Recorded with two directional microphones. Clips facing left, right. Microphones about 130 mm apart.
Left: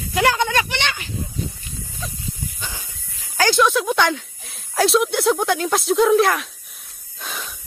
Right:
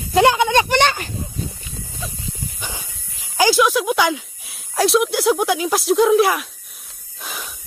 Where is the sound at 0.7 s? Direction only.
45° right (ahead or behind).